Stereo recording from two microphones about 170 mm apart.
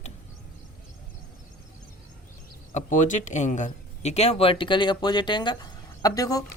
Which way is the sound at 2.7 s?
45° left (ahead or behind).